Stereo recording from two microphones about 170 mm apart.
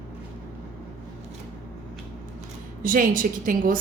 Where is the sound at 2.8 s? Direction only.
55° right (ahead or behind).